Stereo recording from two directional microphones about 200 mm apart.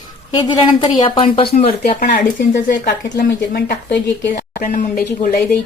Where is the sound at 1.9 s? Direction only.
45° left (ahead or behind).